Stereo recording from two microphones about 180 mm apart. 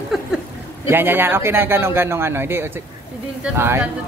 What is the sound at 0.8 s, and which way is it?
Speech, 10° right (ahead or behind).